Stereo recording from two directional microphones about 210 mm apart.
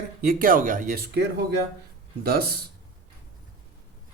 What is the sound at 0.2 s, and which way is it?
Speech, 45° right (ahead or behind).